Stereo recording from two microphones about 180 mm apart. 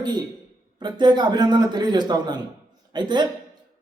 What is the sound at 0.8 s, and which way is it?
Speech, 25° right (ahead or behind).